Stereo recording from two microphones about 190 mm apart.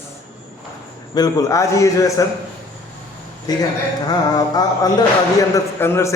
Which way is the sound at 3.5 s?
20° left (ahead or behind).